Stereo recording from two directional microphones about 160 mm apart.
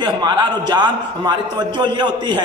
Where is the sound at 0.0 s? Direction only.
25° right (ahead or behind).